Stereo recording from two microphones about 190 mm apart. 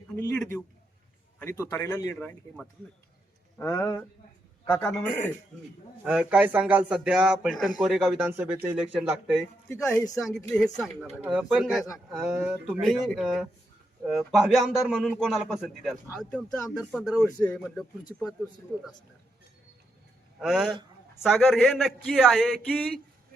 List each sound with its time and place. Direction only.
0.2 s a man's voice: 10° left (ahead or behind)
2.1 s a man's voice: 5° left (ahead or behind)
3.6 s a man's voice: 15° left (ahead or behind)
20.4 s a man's voice: 5° right (ahead or behind)